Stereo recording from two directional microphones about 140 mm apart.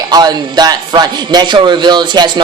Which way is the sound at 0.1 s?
30° right (ahead or behind).